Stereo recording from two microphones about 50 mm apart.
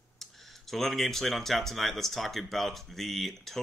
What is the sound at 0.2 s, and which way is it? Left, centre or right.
Speech, centre.